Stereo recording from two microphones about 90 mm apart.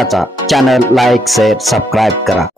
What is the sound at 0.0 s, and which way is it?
Speech, centre (ahead or behind).